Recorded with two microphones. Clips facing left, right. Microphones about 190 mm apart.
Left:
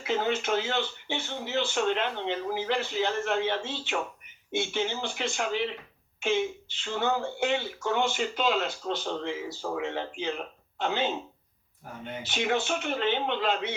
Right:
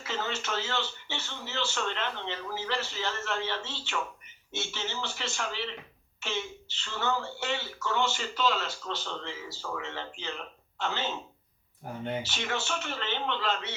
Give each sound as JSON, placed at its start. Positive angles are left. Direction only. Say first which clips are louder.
{"t": 0.1, "sound": "speech", "louder": "left 7 dB", "side_deg": 55}
{"t": 12.2, "sound": "speech", "louder": "left 6 dB", "side_deg": 55}